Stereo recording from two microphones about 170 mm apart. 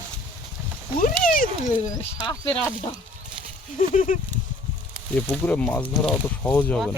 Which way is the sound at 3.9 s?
50° left (ahead or behind).